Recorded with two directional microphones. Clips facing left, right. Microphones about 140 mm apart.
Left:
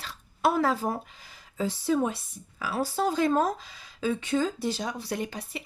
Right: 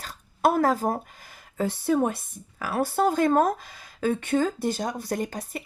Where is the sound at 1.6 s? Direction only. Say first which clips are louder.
Right 3 dB; 55° right (ahead or behind).